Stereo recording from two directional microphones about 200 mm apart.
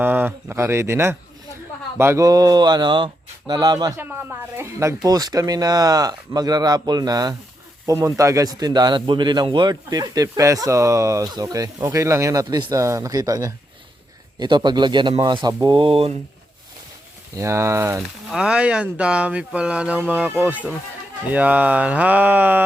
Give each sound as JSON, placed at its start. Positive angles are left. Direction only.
{"t": 0.0, "sound": "speech", "side_deg": -10}
{"t": 17.3, "sound": "speech", "side_deg": -15}
{"t": 18.3, "sound": "speech", "side_deg": -5}